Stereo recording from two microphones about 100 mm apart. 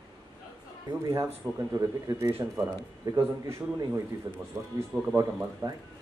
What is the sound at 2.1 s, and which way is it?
A man's voice, 25° right (ahead or behind).